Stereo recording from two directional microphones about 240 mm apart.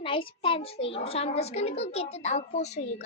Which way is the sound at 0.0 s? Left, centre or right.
Left.